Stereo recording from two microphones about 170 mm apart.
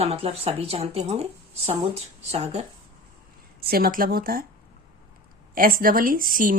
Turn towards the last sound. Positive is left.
turn(degrees=-55)  # may be behind; listen again after turning